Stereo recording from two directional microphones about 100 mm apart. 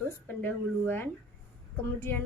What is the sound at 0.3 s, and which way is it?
A woman's voice, 20° left (ahead or behind).